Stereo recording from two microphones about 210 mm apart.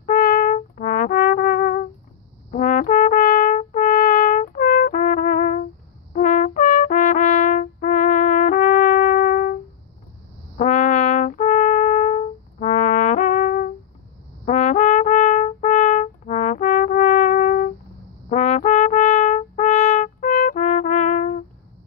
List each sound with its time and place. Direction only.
0.0 s brass instrument: 45° left (ahead or behind)
10.6 s brass instrument: 35° left (ahead or behind)